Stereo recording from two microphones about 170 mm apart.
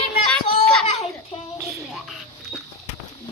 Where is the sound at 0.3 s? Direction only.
5° left (ahead or behind).